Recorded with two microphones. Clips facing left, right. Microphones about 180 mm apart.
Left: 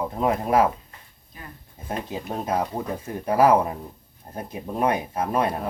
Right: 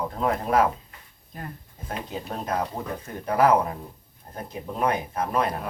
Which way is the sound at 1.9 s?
20° left (ahead or behind).